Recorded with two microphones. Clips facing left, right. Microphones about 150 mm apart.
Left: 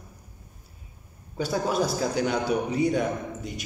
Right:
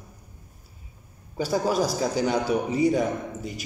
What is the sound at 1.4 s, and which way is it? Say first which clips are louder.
Speech: right 2 dB; centre (ahead or behind).